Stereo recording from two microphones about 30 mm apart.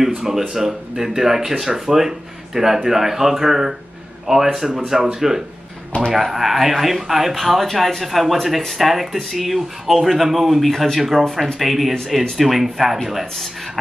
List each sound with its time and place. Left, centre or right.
0.0 s speech: centre